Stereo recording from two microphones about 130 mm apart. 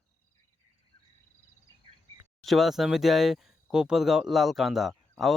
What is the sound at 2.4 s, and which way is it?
Speech, centre (ahead or behind).